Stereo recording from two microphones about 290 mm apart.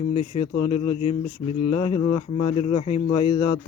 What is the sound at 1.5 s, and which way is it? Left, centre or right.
Speech, left.